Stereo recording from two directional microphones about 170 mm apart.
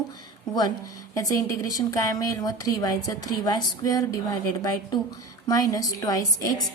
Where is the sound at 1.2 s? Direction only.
20° left (ahead or behind).